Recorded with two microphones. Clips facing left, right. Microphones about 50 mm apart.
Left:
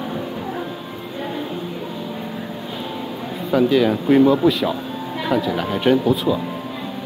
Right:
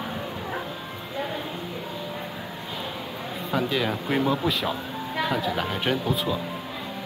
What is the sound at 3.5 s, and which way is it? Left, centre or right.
Speech, centre.